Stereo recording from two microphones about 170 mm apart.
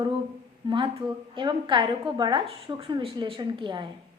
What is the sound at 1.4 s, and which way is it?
A woman's voice, 25° right (ahead or behind).